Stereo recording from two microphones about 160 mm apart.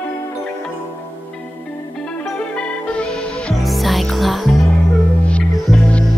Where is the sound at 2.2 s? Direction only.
5° left (ahead or behind).